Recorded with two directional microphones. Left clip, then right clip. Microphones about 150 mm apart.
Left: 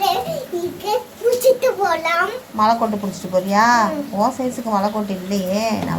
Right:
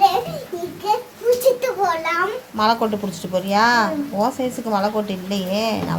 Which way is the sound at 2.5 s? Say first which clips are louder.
Left 2 dB; 15° right (ahead or behind).